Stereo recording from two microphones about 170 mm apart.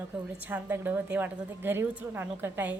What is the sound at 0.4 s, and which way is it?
A woman's voice, 10° right (ahead or behind).